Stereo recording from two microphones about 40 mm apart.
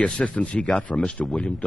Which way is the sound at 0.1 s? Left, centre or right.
Left.